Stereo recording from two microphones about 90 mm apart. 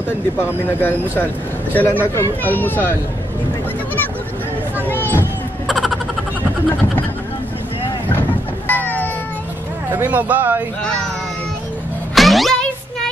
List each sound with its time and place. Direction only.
0.4 s speech: 25° left (ahead or behind)
4.8 s a sound: 20° left (ahead or behind)
5.7 s a sound: centre (ahead or behind)
8.6 s music: 20° left (ahead or behind)
9.9 s speech: 20° right (ahead or behind)
12.2 s music: centre (ahead or behind)